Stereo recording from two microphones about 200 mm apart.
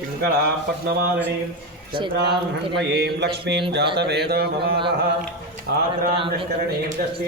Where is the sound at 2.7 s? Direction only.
60° right (ahead or behind).